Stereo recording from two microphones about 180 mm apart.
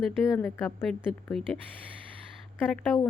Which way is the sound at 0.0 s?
Centre (ahead or behind).